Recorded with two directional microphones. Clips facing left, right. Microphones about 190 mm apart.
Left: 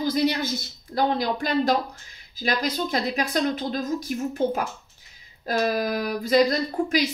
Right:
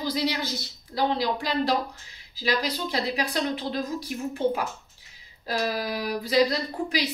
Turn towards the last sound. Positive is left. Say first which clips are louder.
# left 5 dB
turn(degrees=45)  # may be behind; listen again after turning